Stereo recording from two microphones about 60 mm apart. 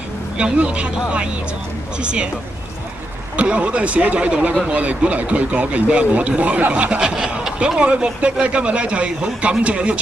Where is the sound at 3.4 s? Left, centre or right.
Centre.